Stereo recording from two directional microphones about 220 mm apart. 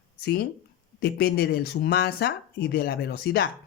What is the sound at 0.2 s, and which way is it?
A man's voice, 45° left (ahead or behind).